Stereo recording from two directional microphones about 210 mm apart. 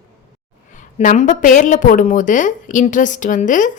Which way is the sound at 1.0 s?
35° left (ahead or behind).